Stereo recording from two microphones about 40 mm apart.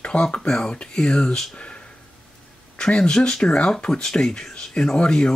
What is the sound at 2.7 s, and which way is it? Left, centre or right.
Speech, left.